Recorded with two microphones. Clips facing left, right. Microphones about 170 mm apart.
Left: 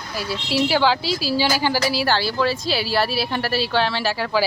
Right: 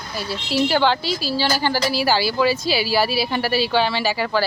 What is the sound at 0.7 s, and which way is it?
Speech, centre (ahead or behind).